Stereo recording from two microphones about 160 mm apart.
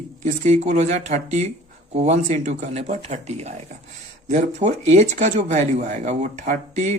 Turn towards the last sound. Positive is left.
turn(degrees=-50)  # may be behind; listen again after turning